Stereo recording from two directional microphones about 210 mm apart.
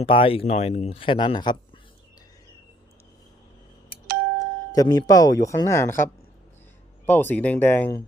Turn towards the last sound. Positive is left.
turn(degrees=10)  # may be behind; listen again after turning